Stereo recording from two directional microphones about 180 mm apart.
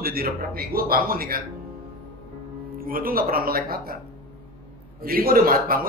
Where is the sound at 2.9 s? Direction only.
55° right (ahead or behind).